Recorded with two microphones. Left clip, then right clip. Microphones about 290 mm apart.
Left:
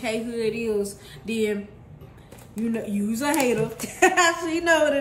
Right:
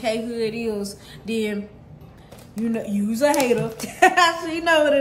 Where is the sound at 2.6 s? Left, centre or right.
Centre.